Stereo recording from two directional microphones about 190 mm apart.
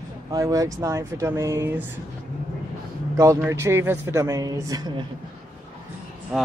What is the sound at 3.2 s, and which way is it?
Speech, 15° right (ahead or behind).